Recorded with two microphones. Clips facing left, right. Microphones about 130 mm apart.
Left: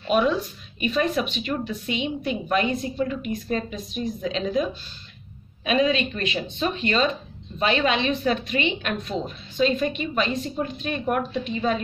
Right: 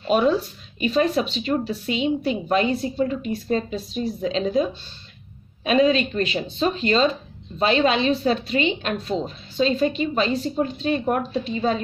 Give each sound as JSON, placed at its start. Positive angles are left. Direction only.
{"t": 0.1, "sound": "speech", "side_deg": -35}